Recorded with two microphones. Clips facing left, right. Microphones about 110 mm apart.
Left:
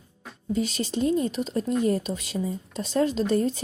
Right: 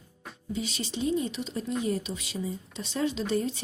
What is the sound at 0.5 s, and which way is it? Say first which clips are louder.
Speech: left 7 dB; 45° left (ahead or behind).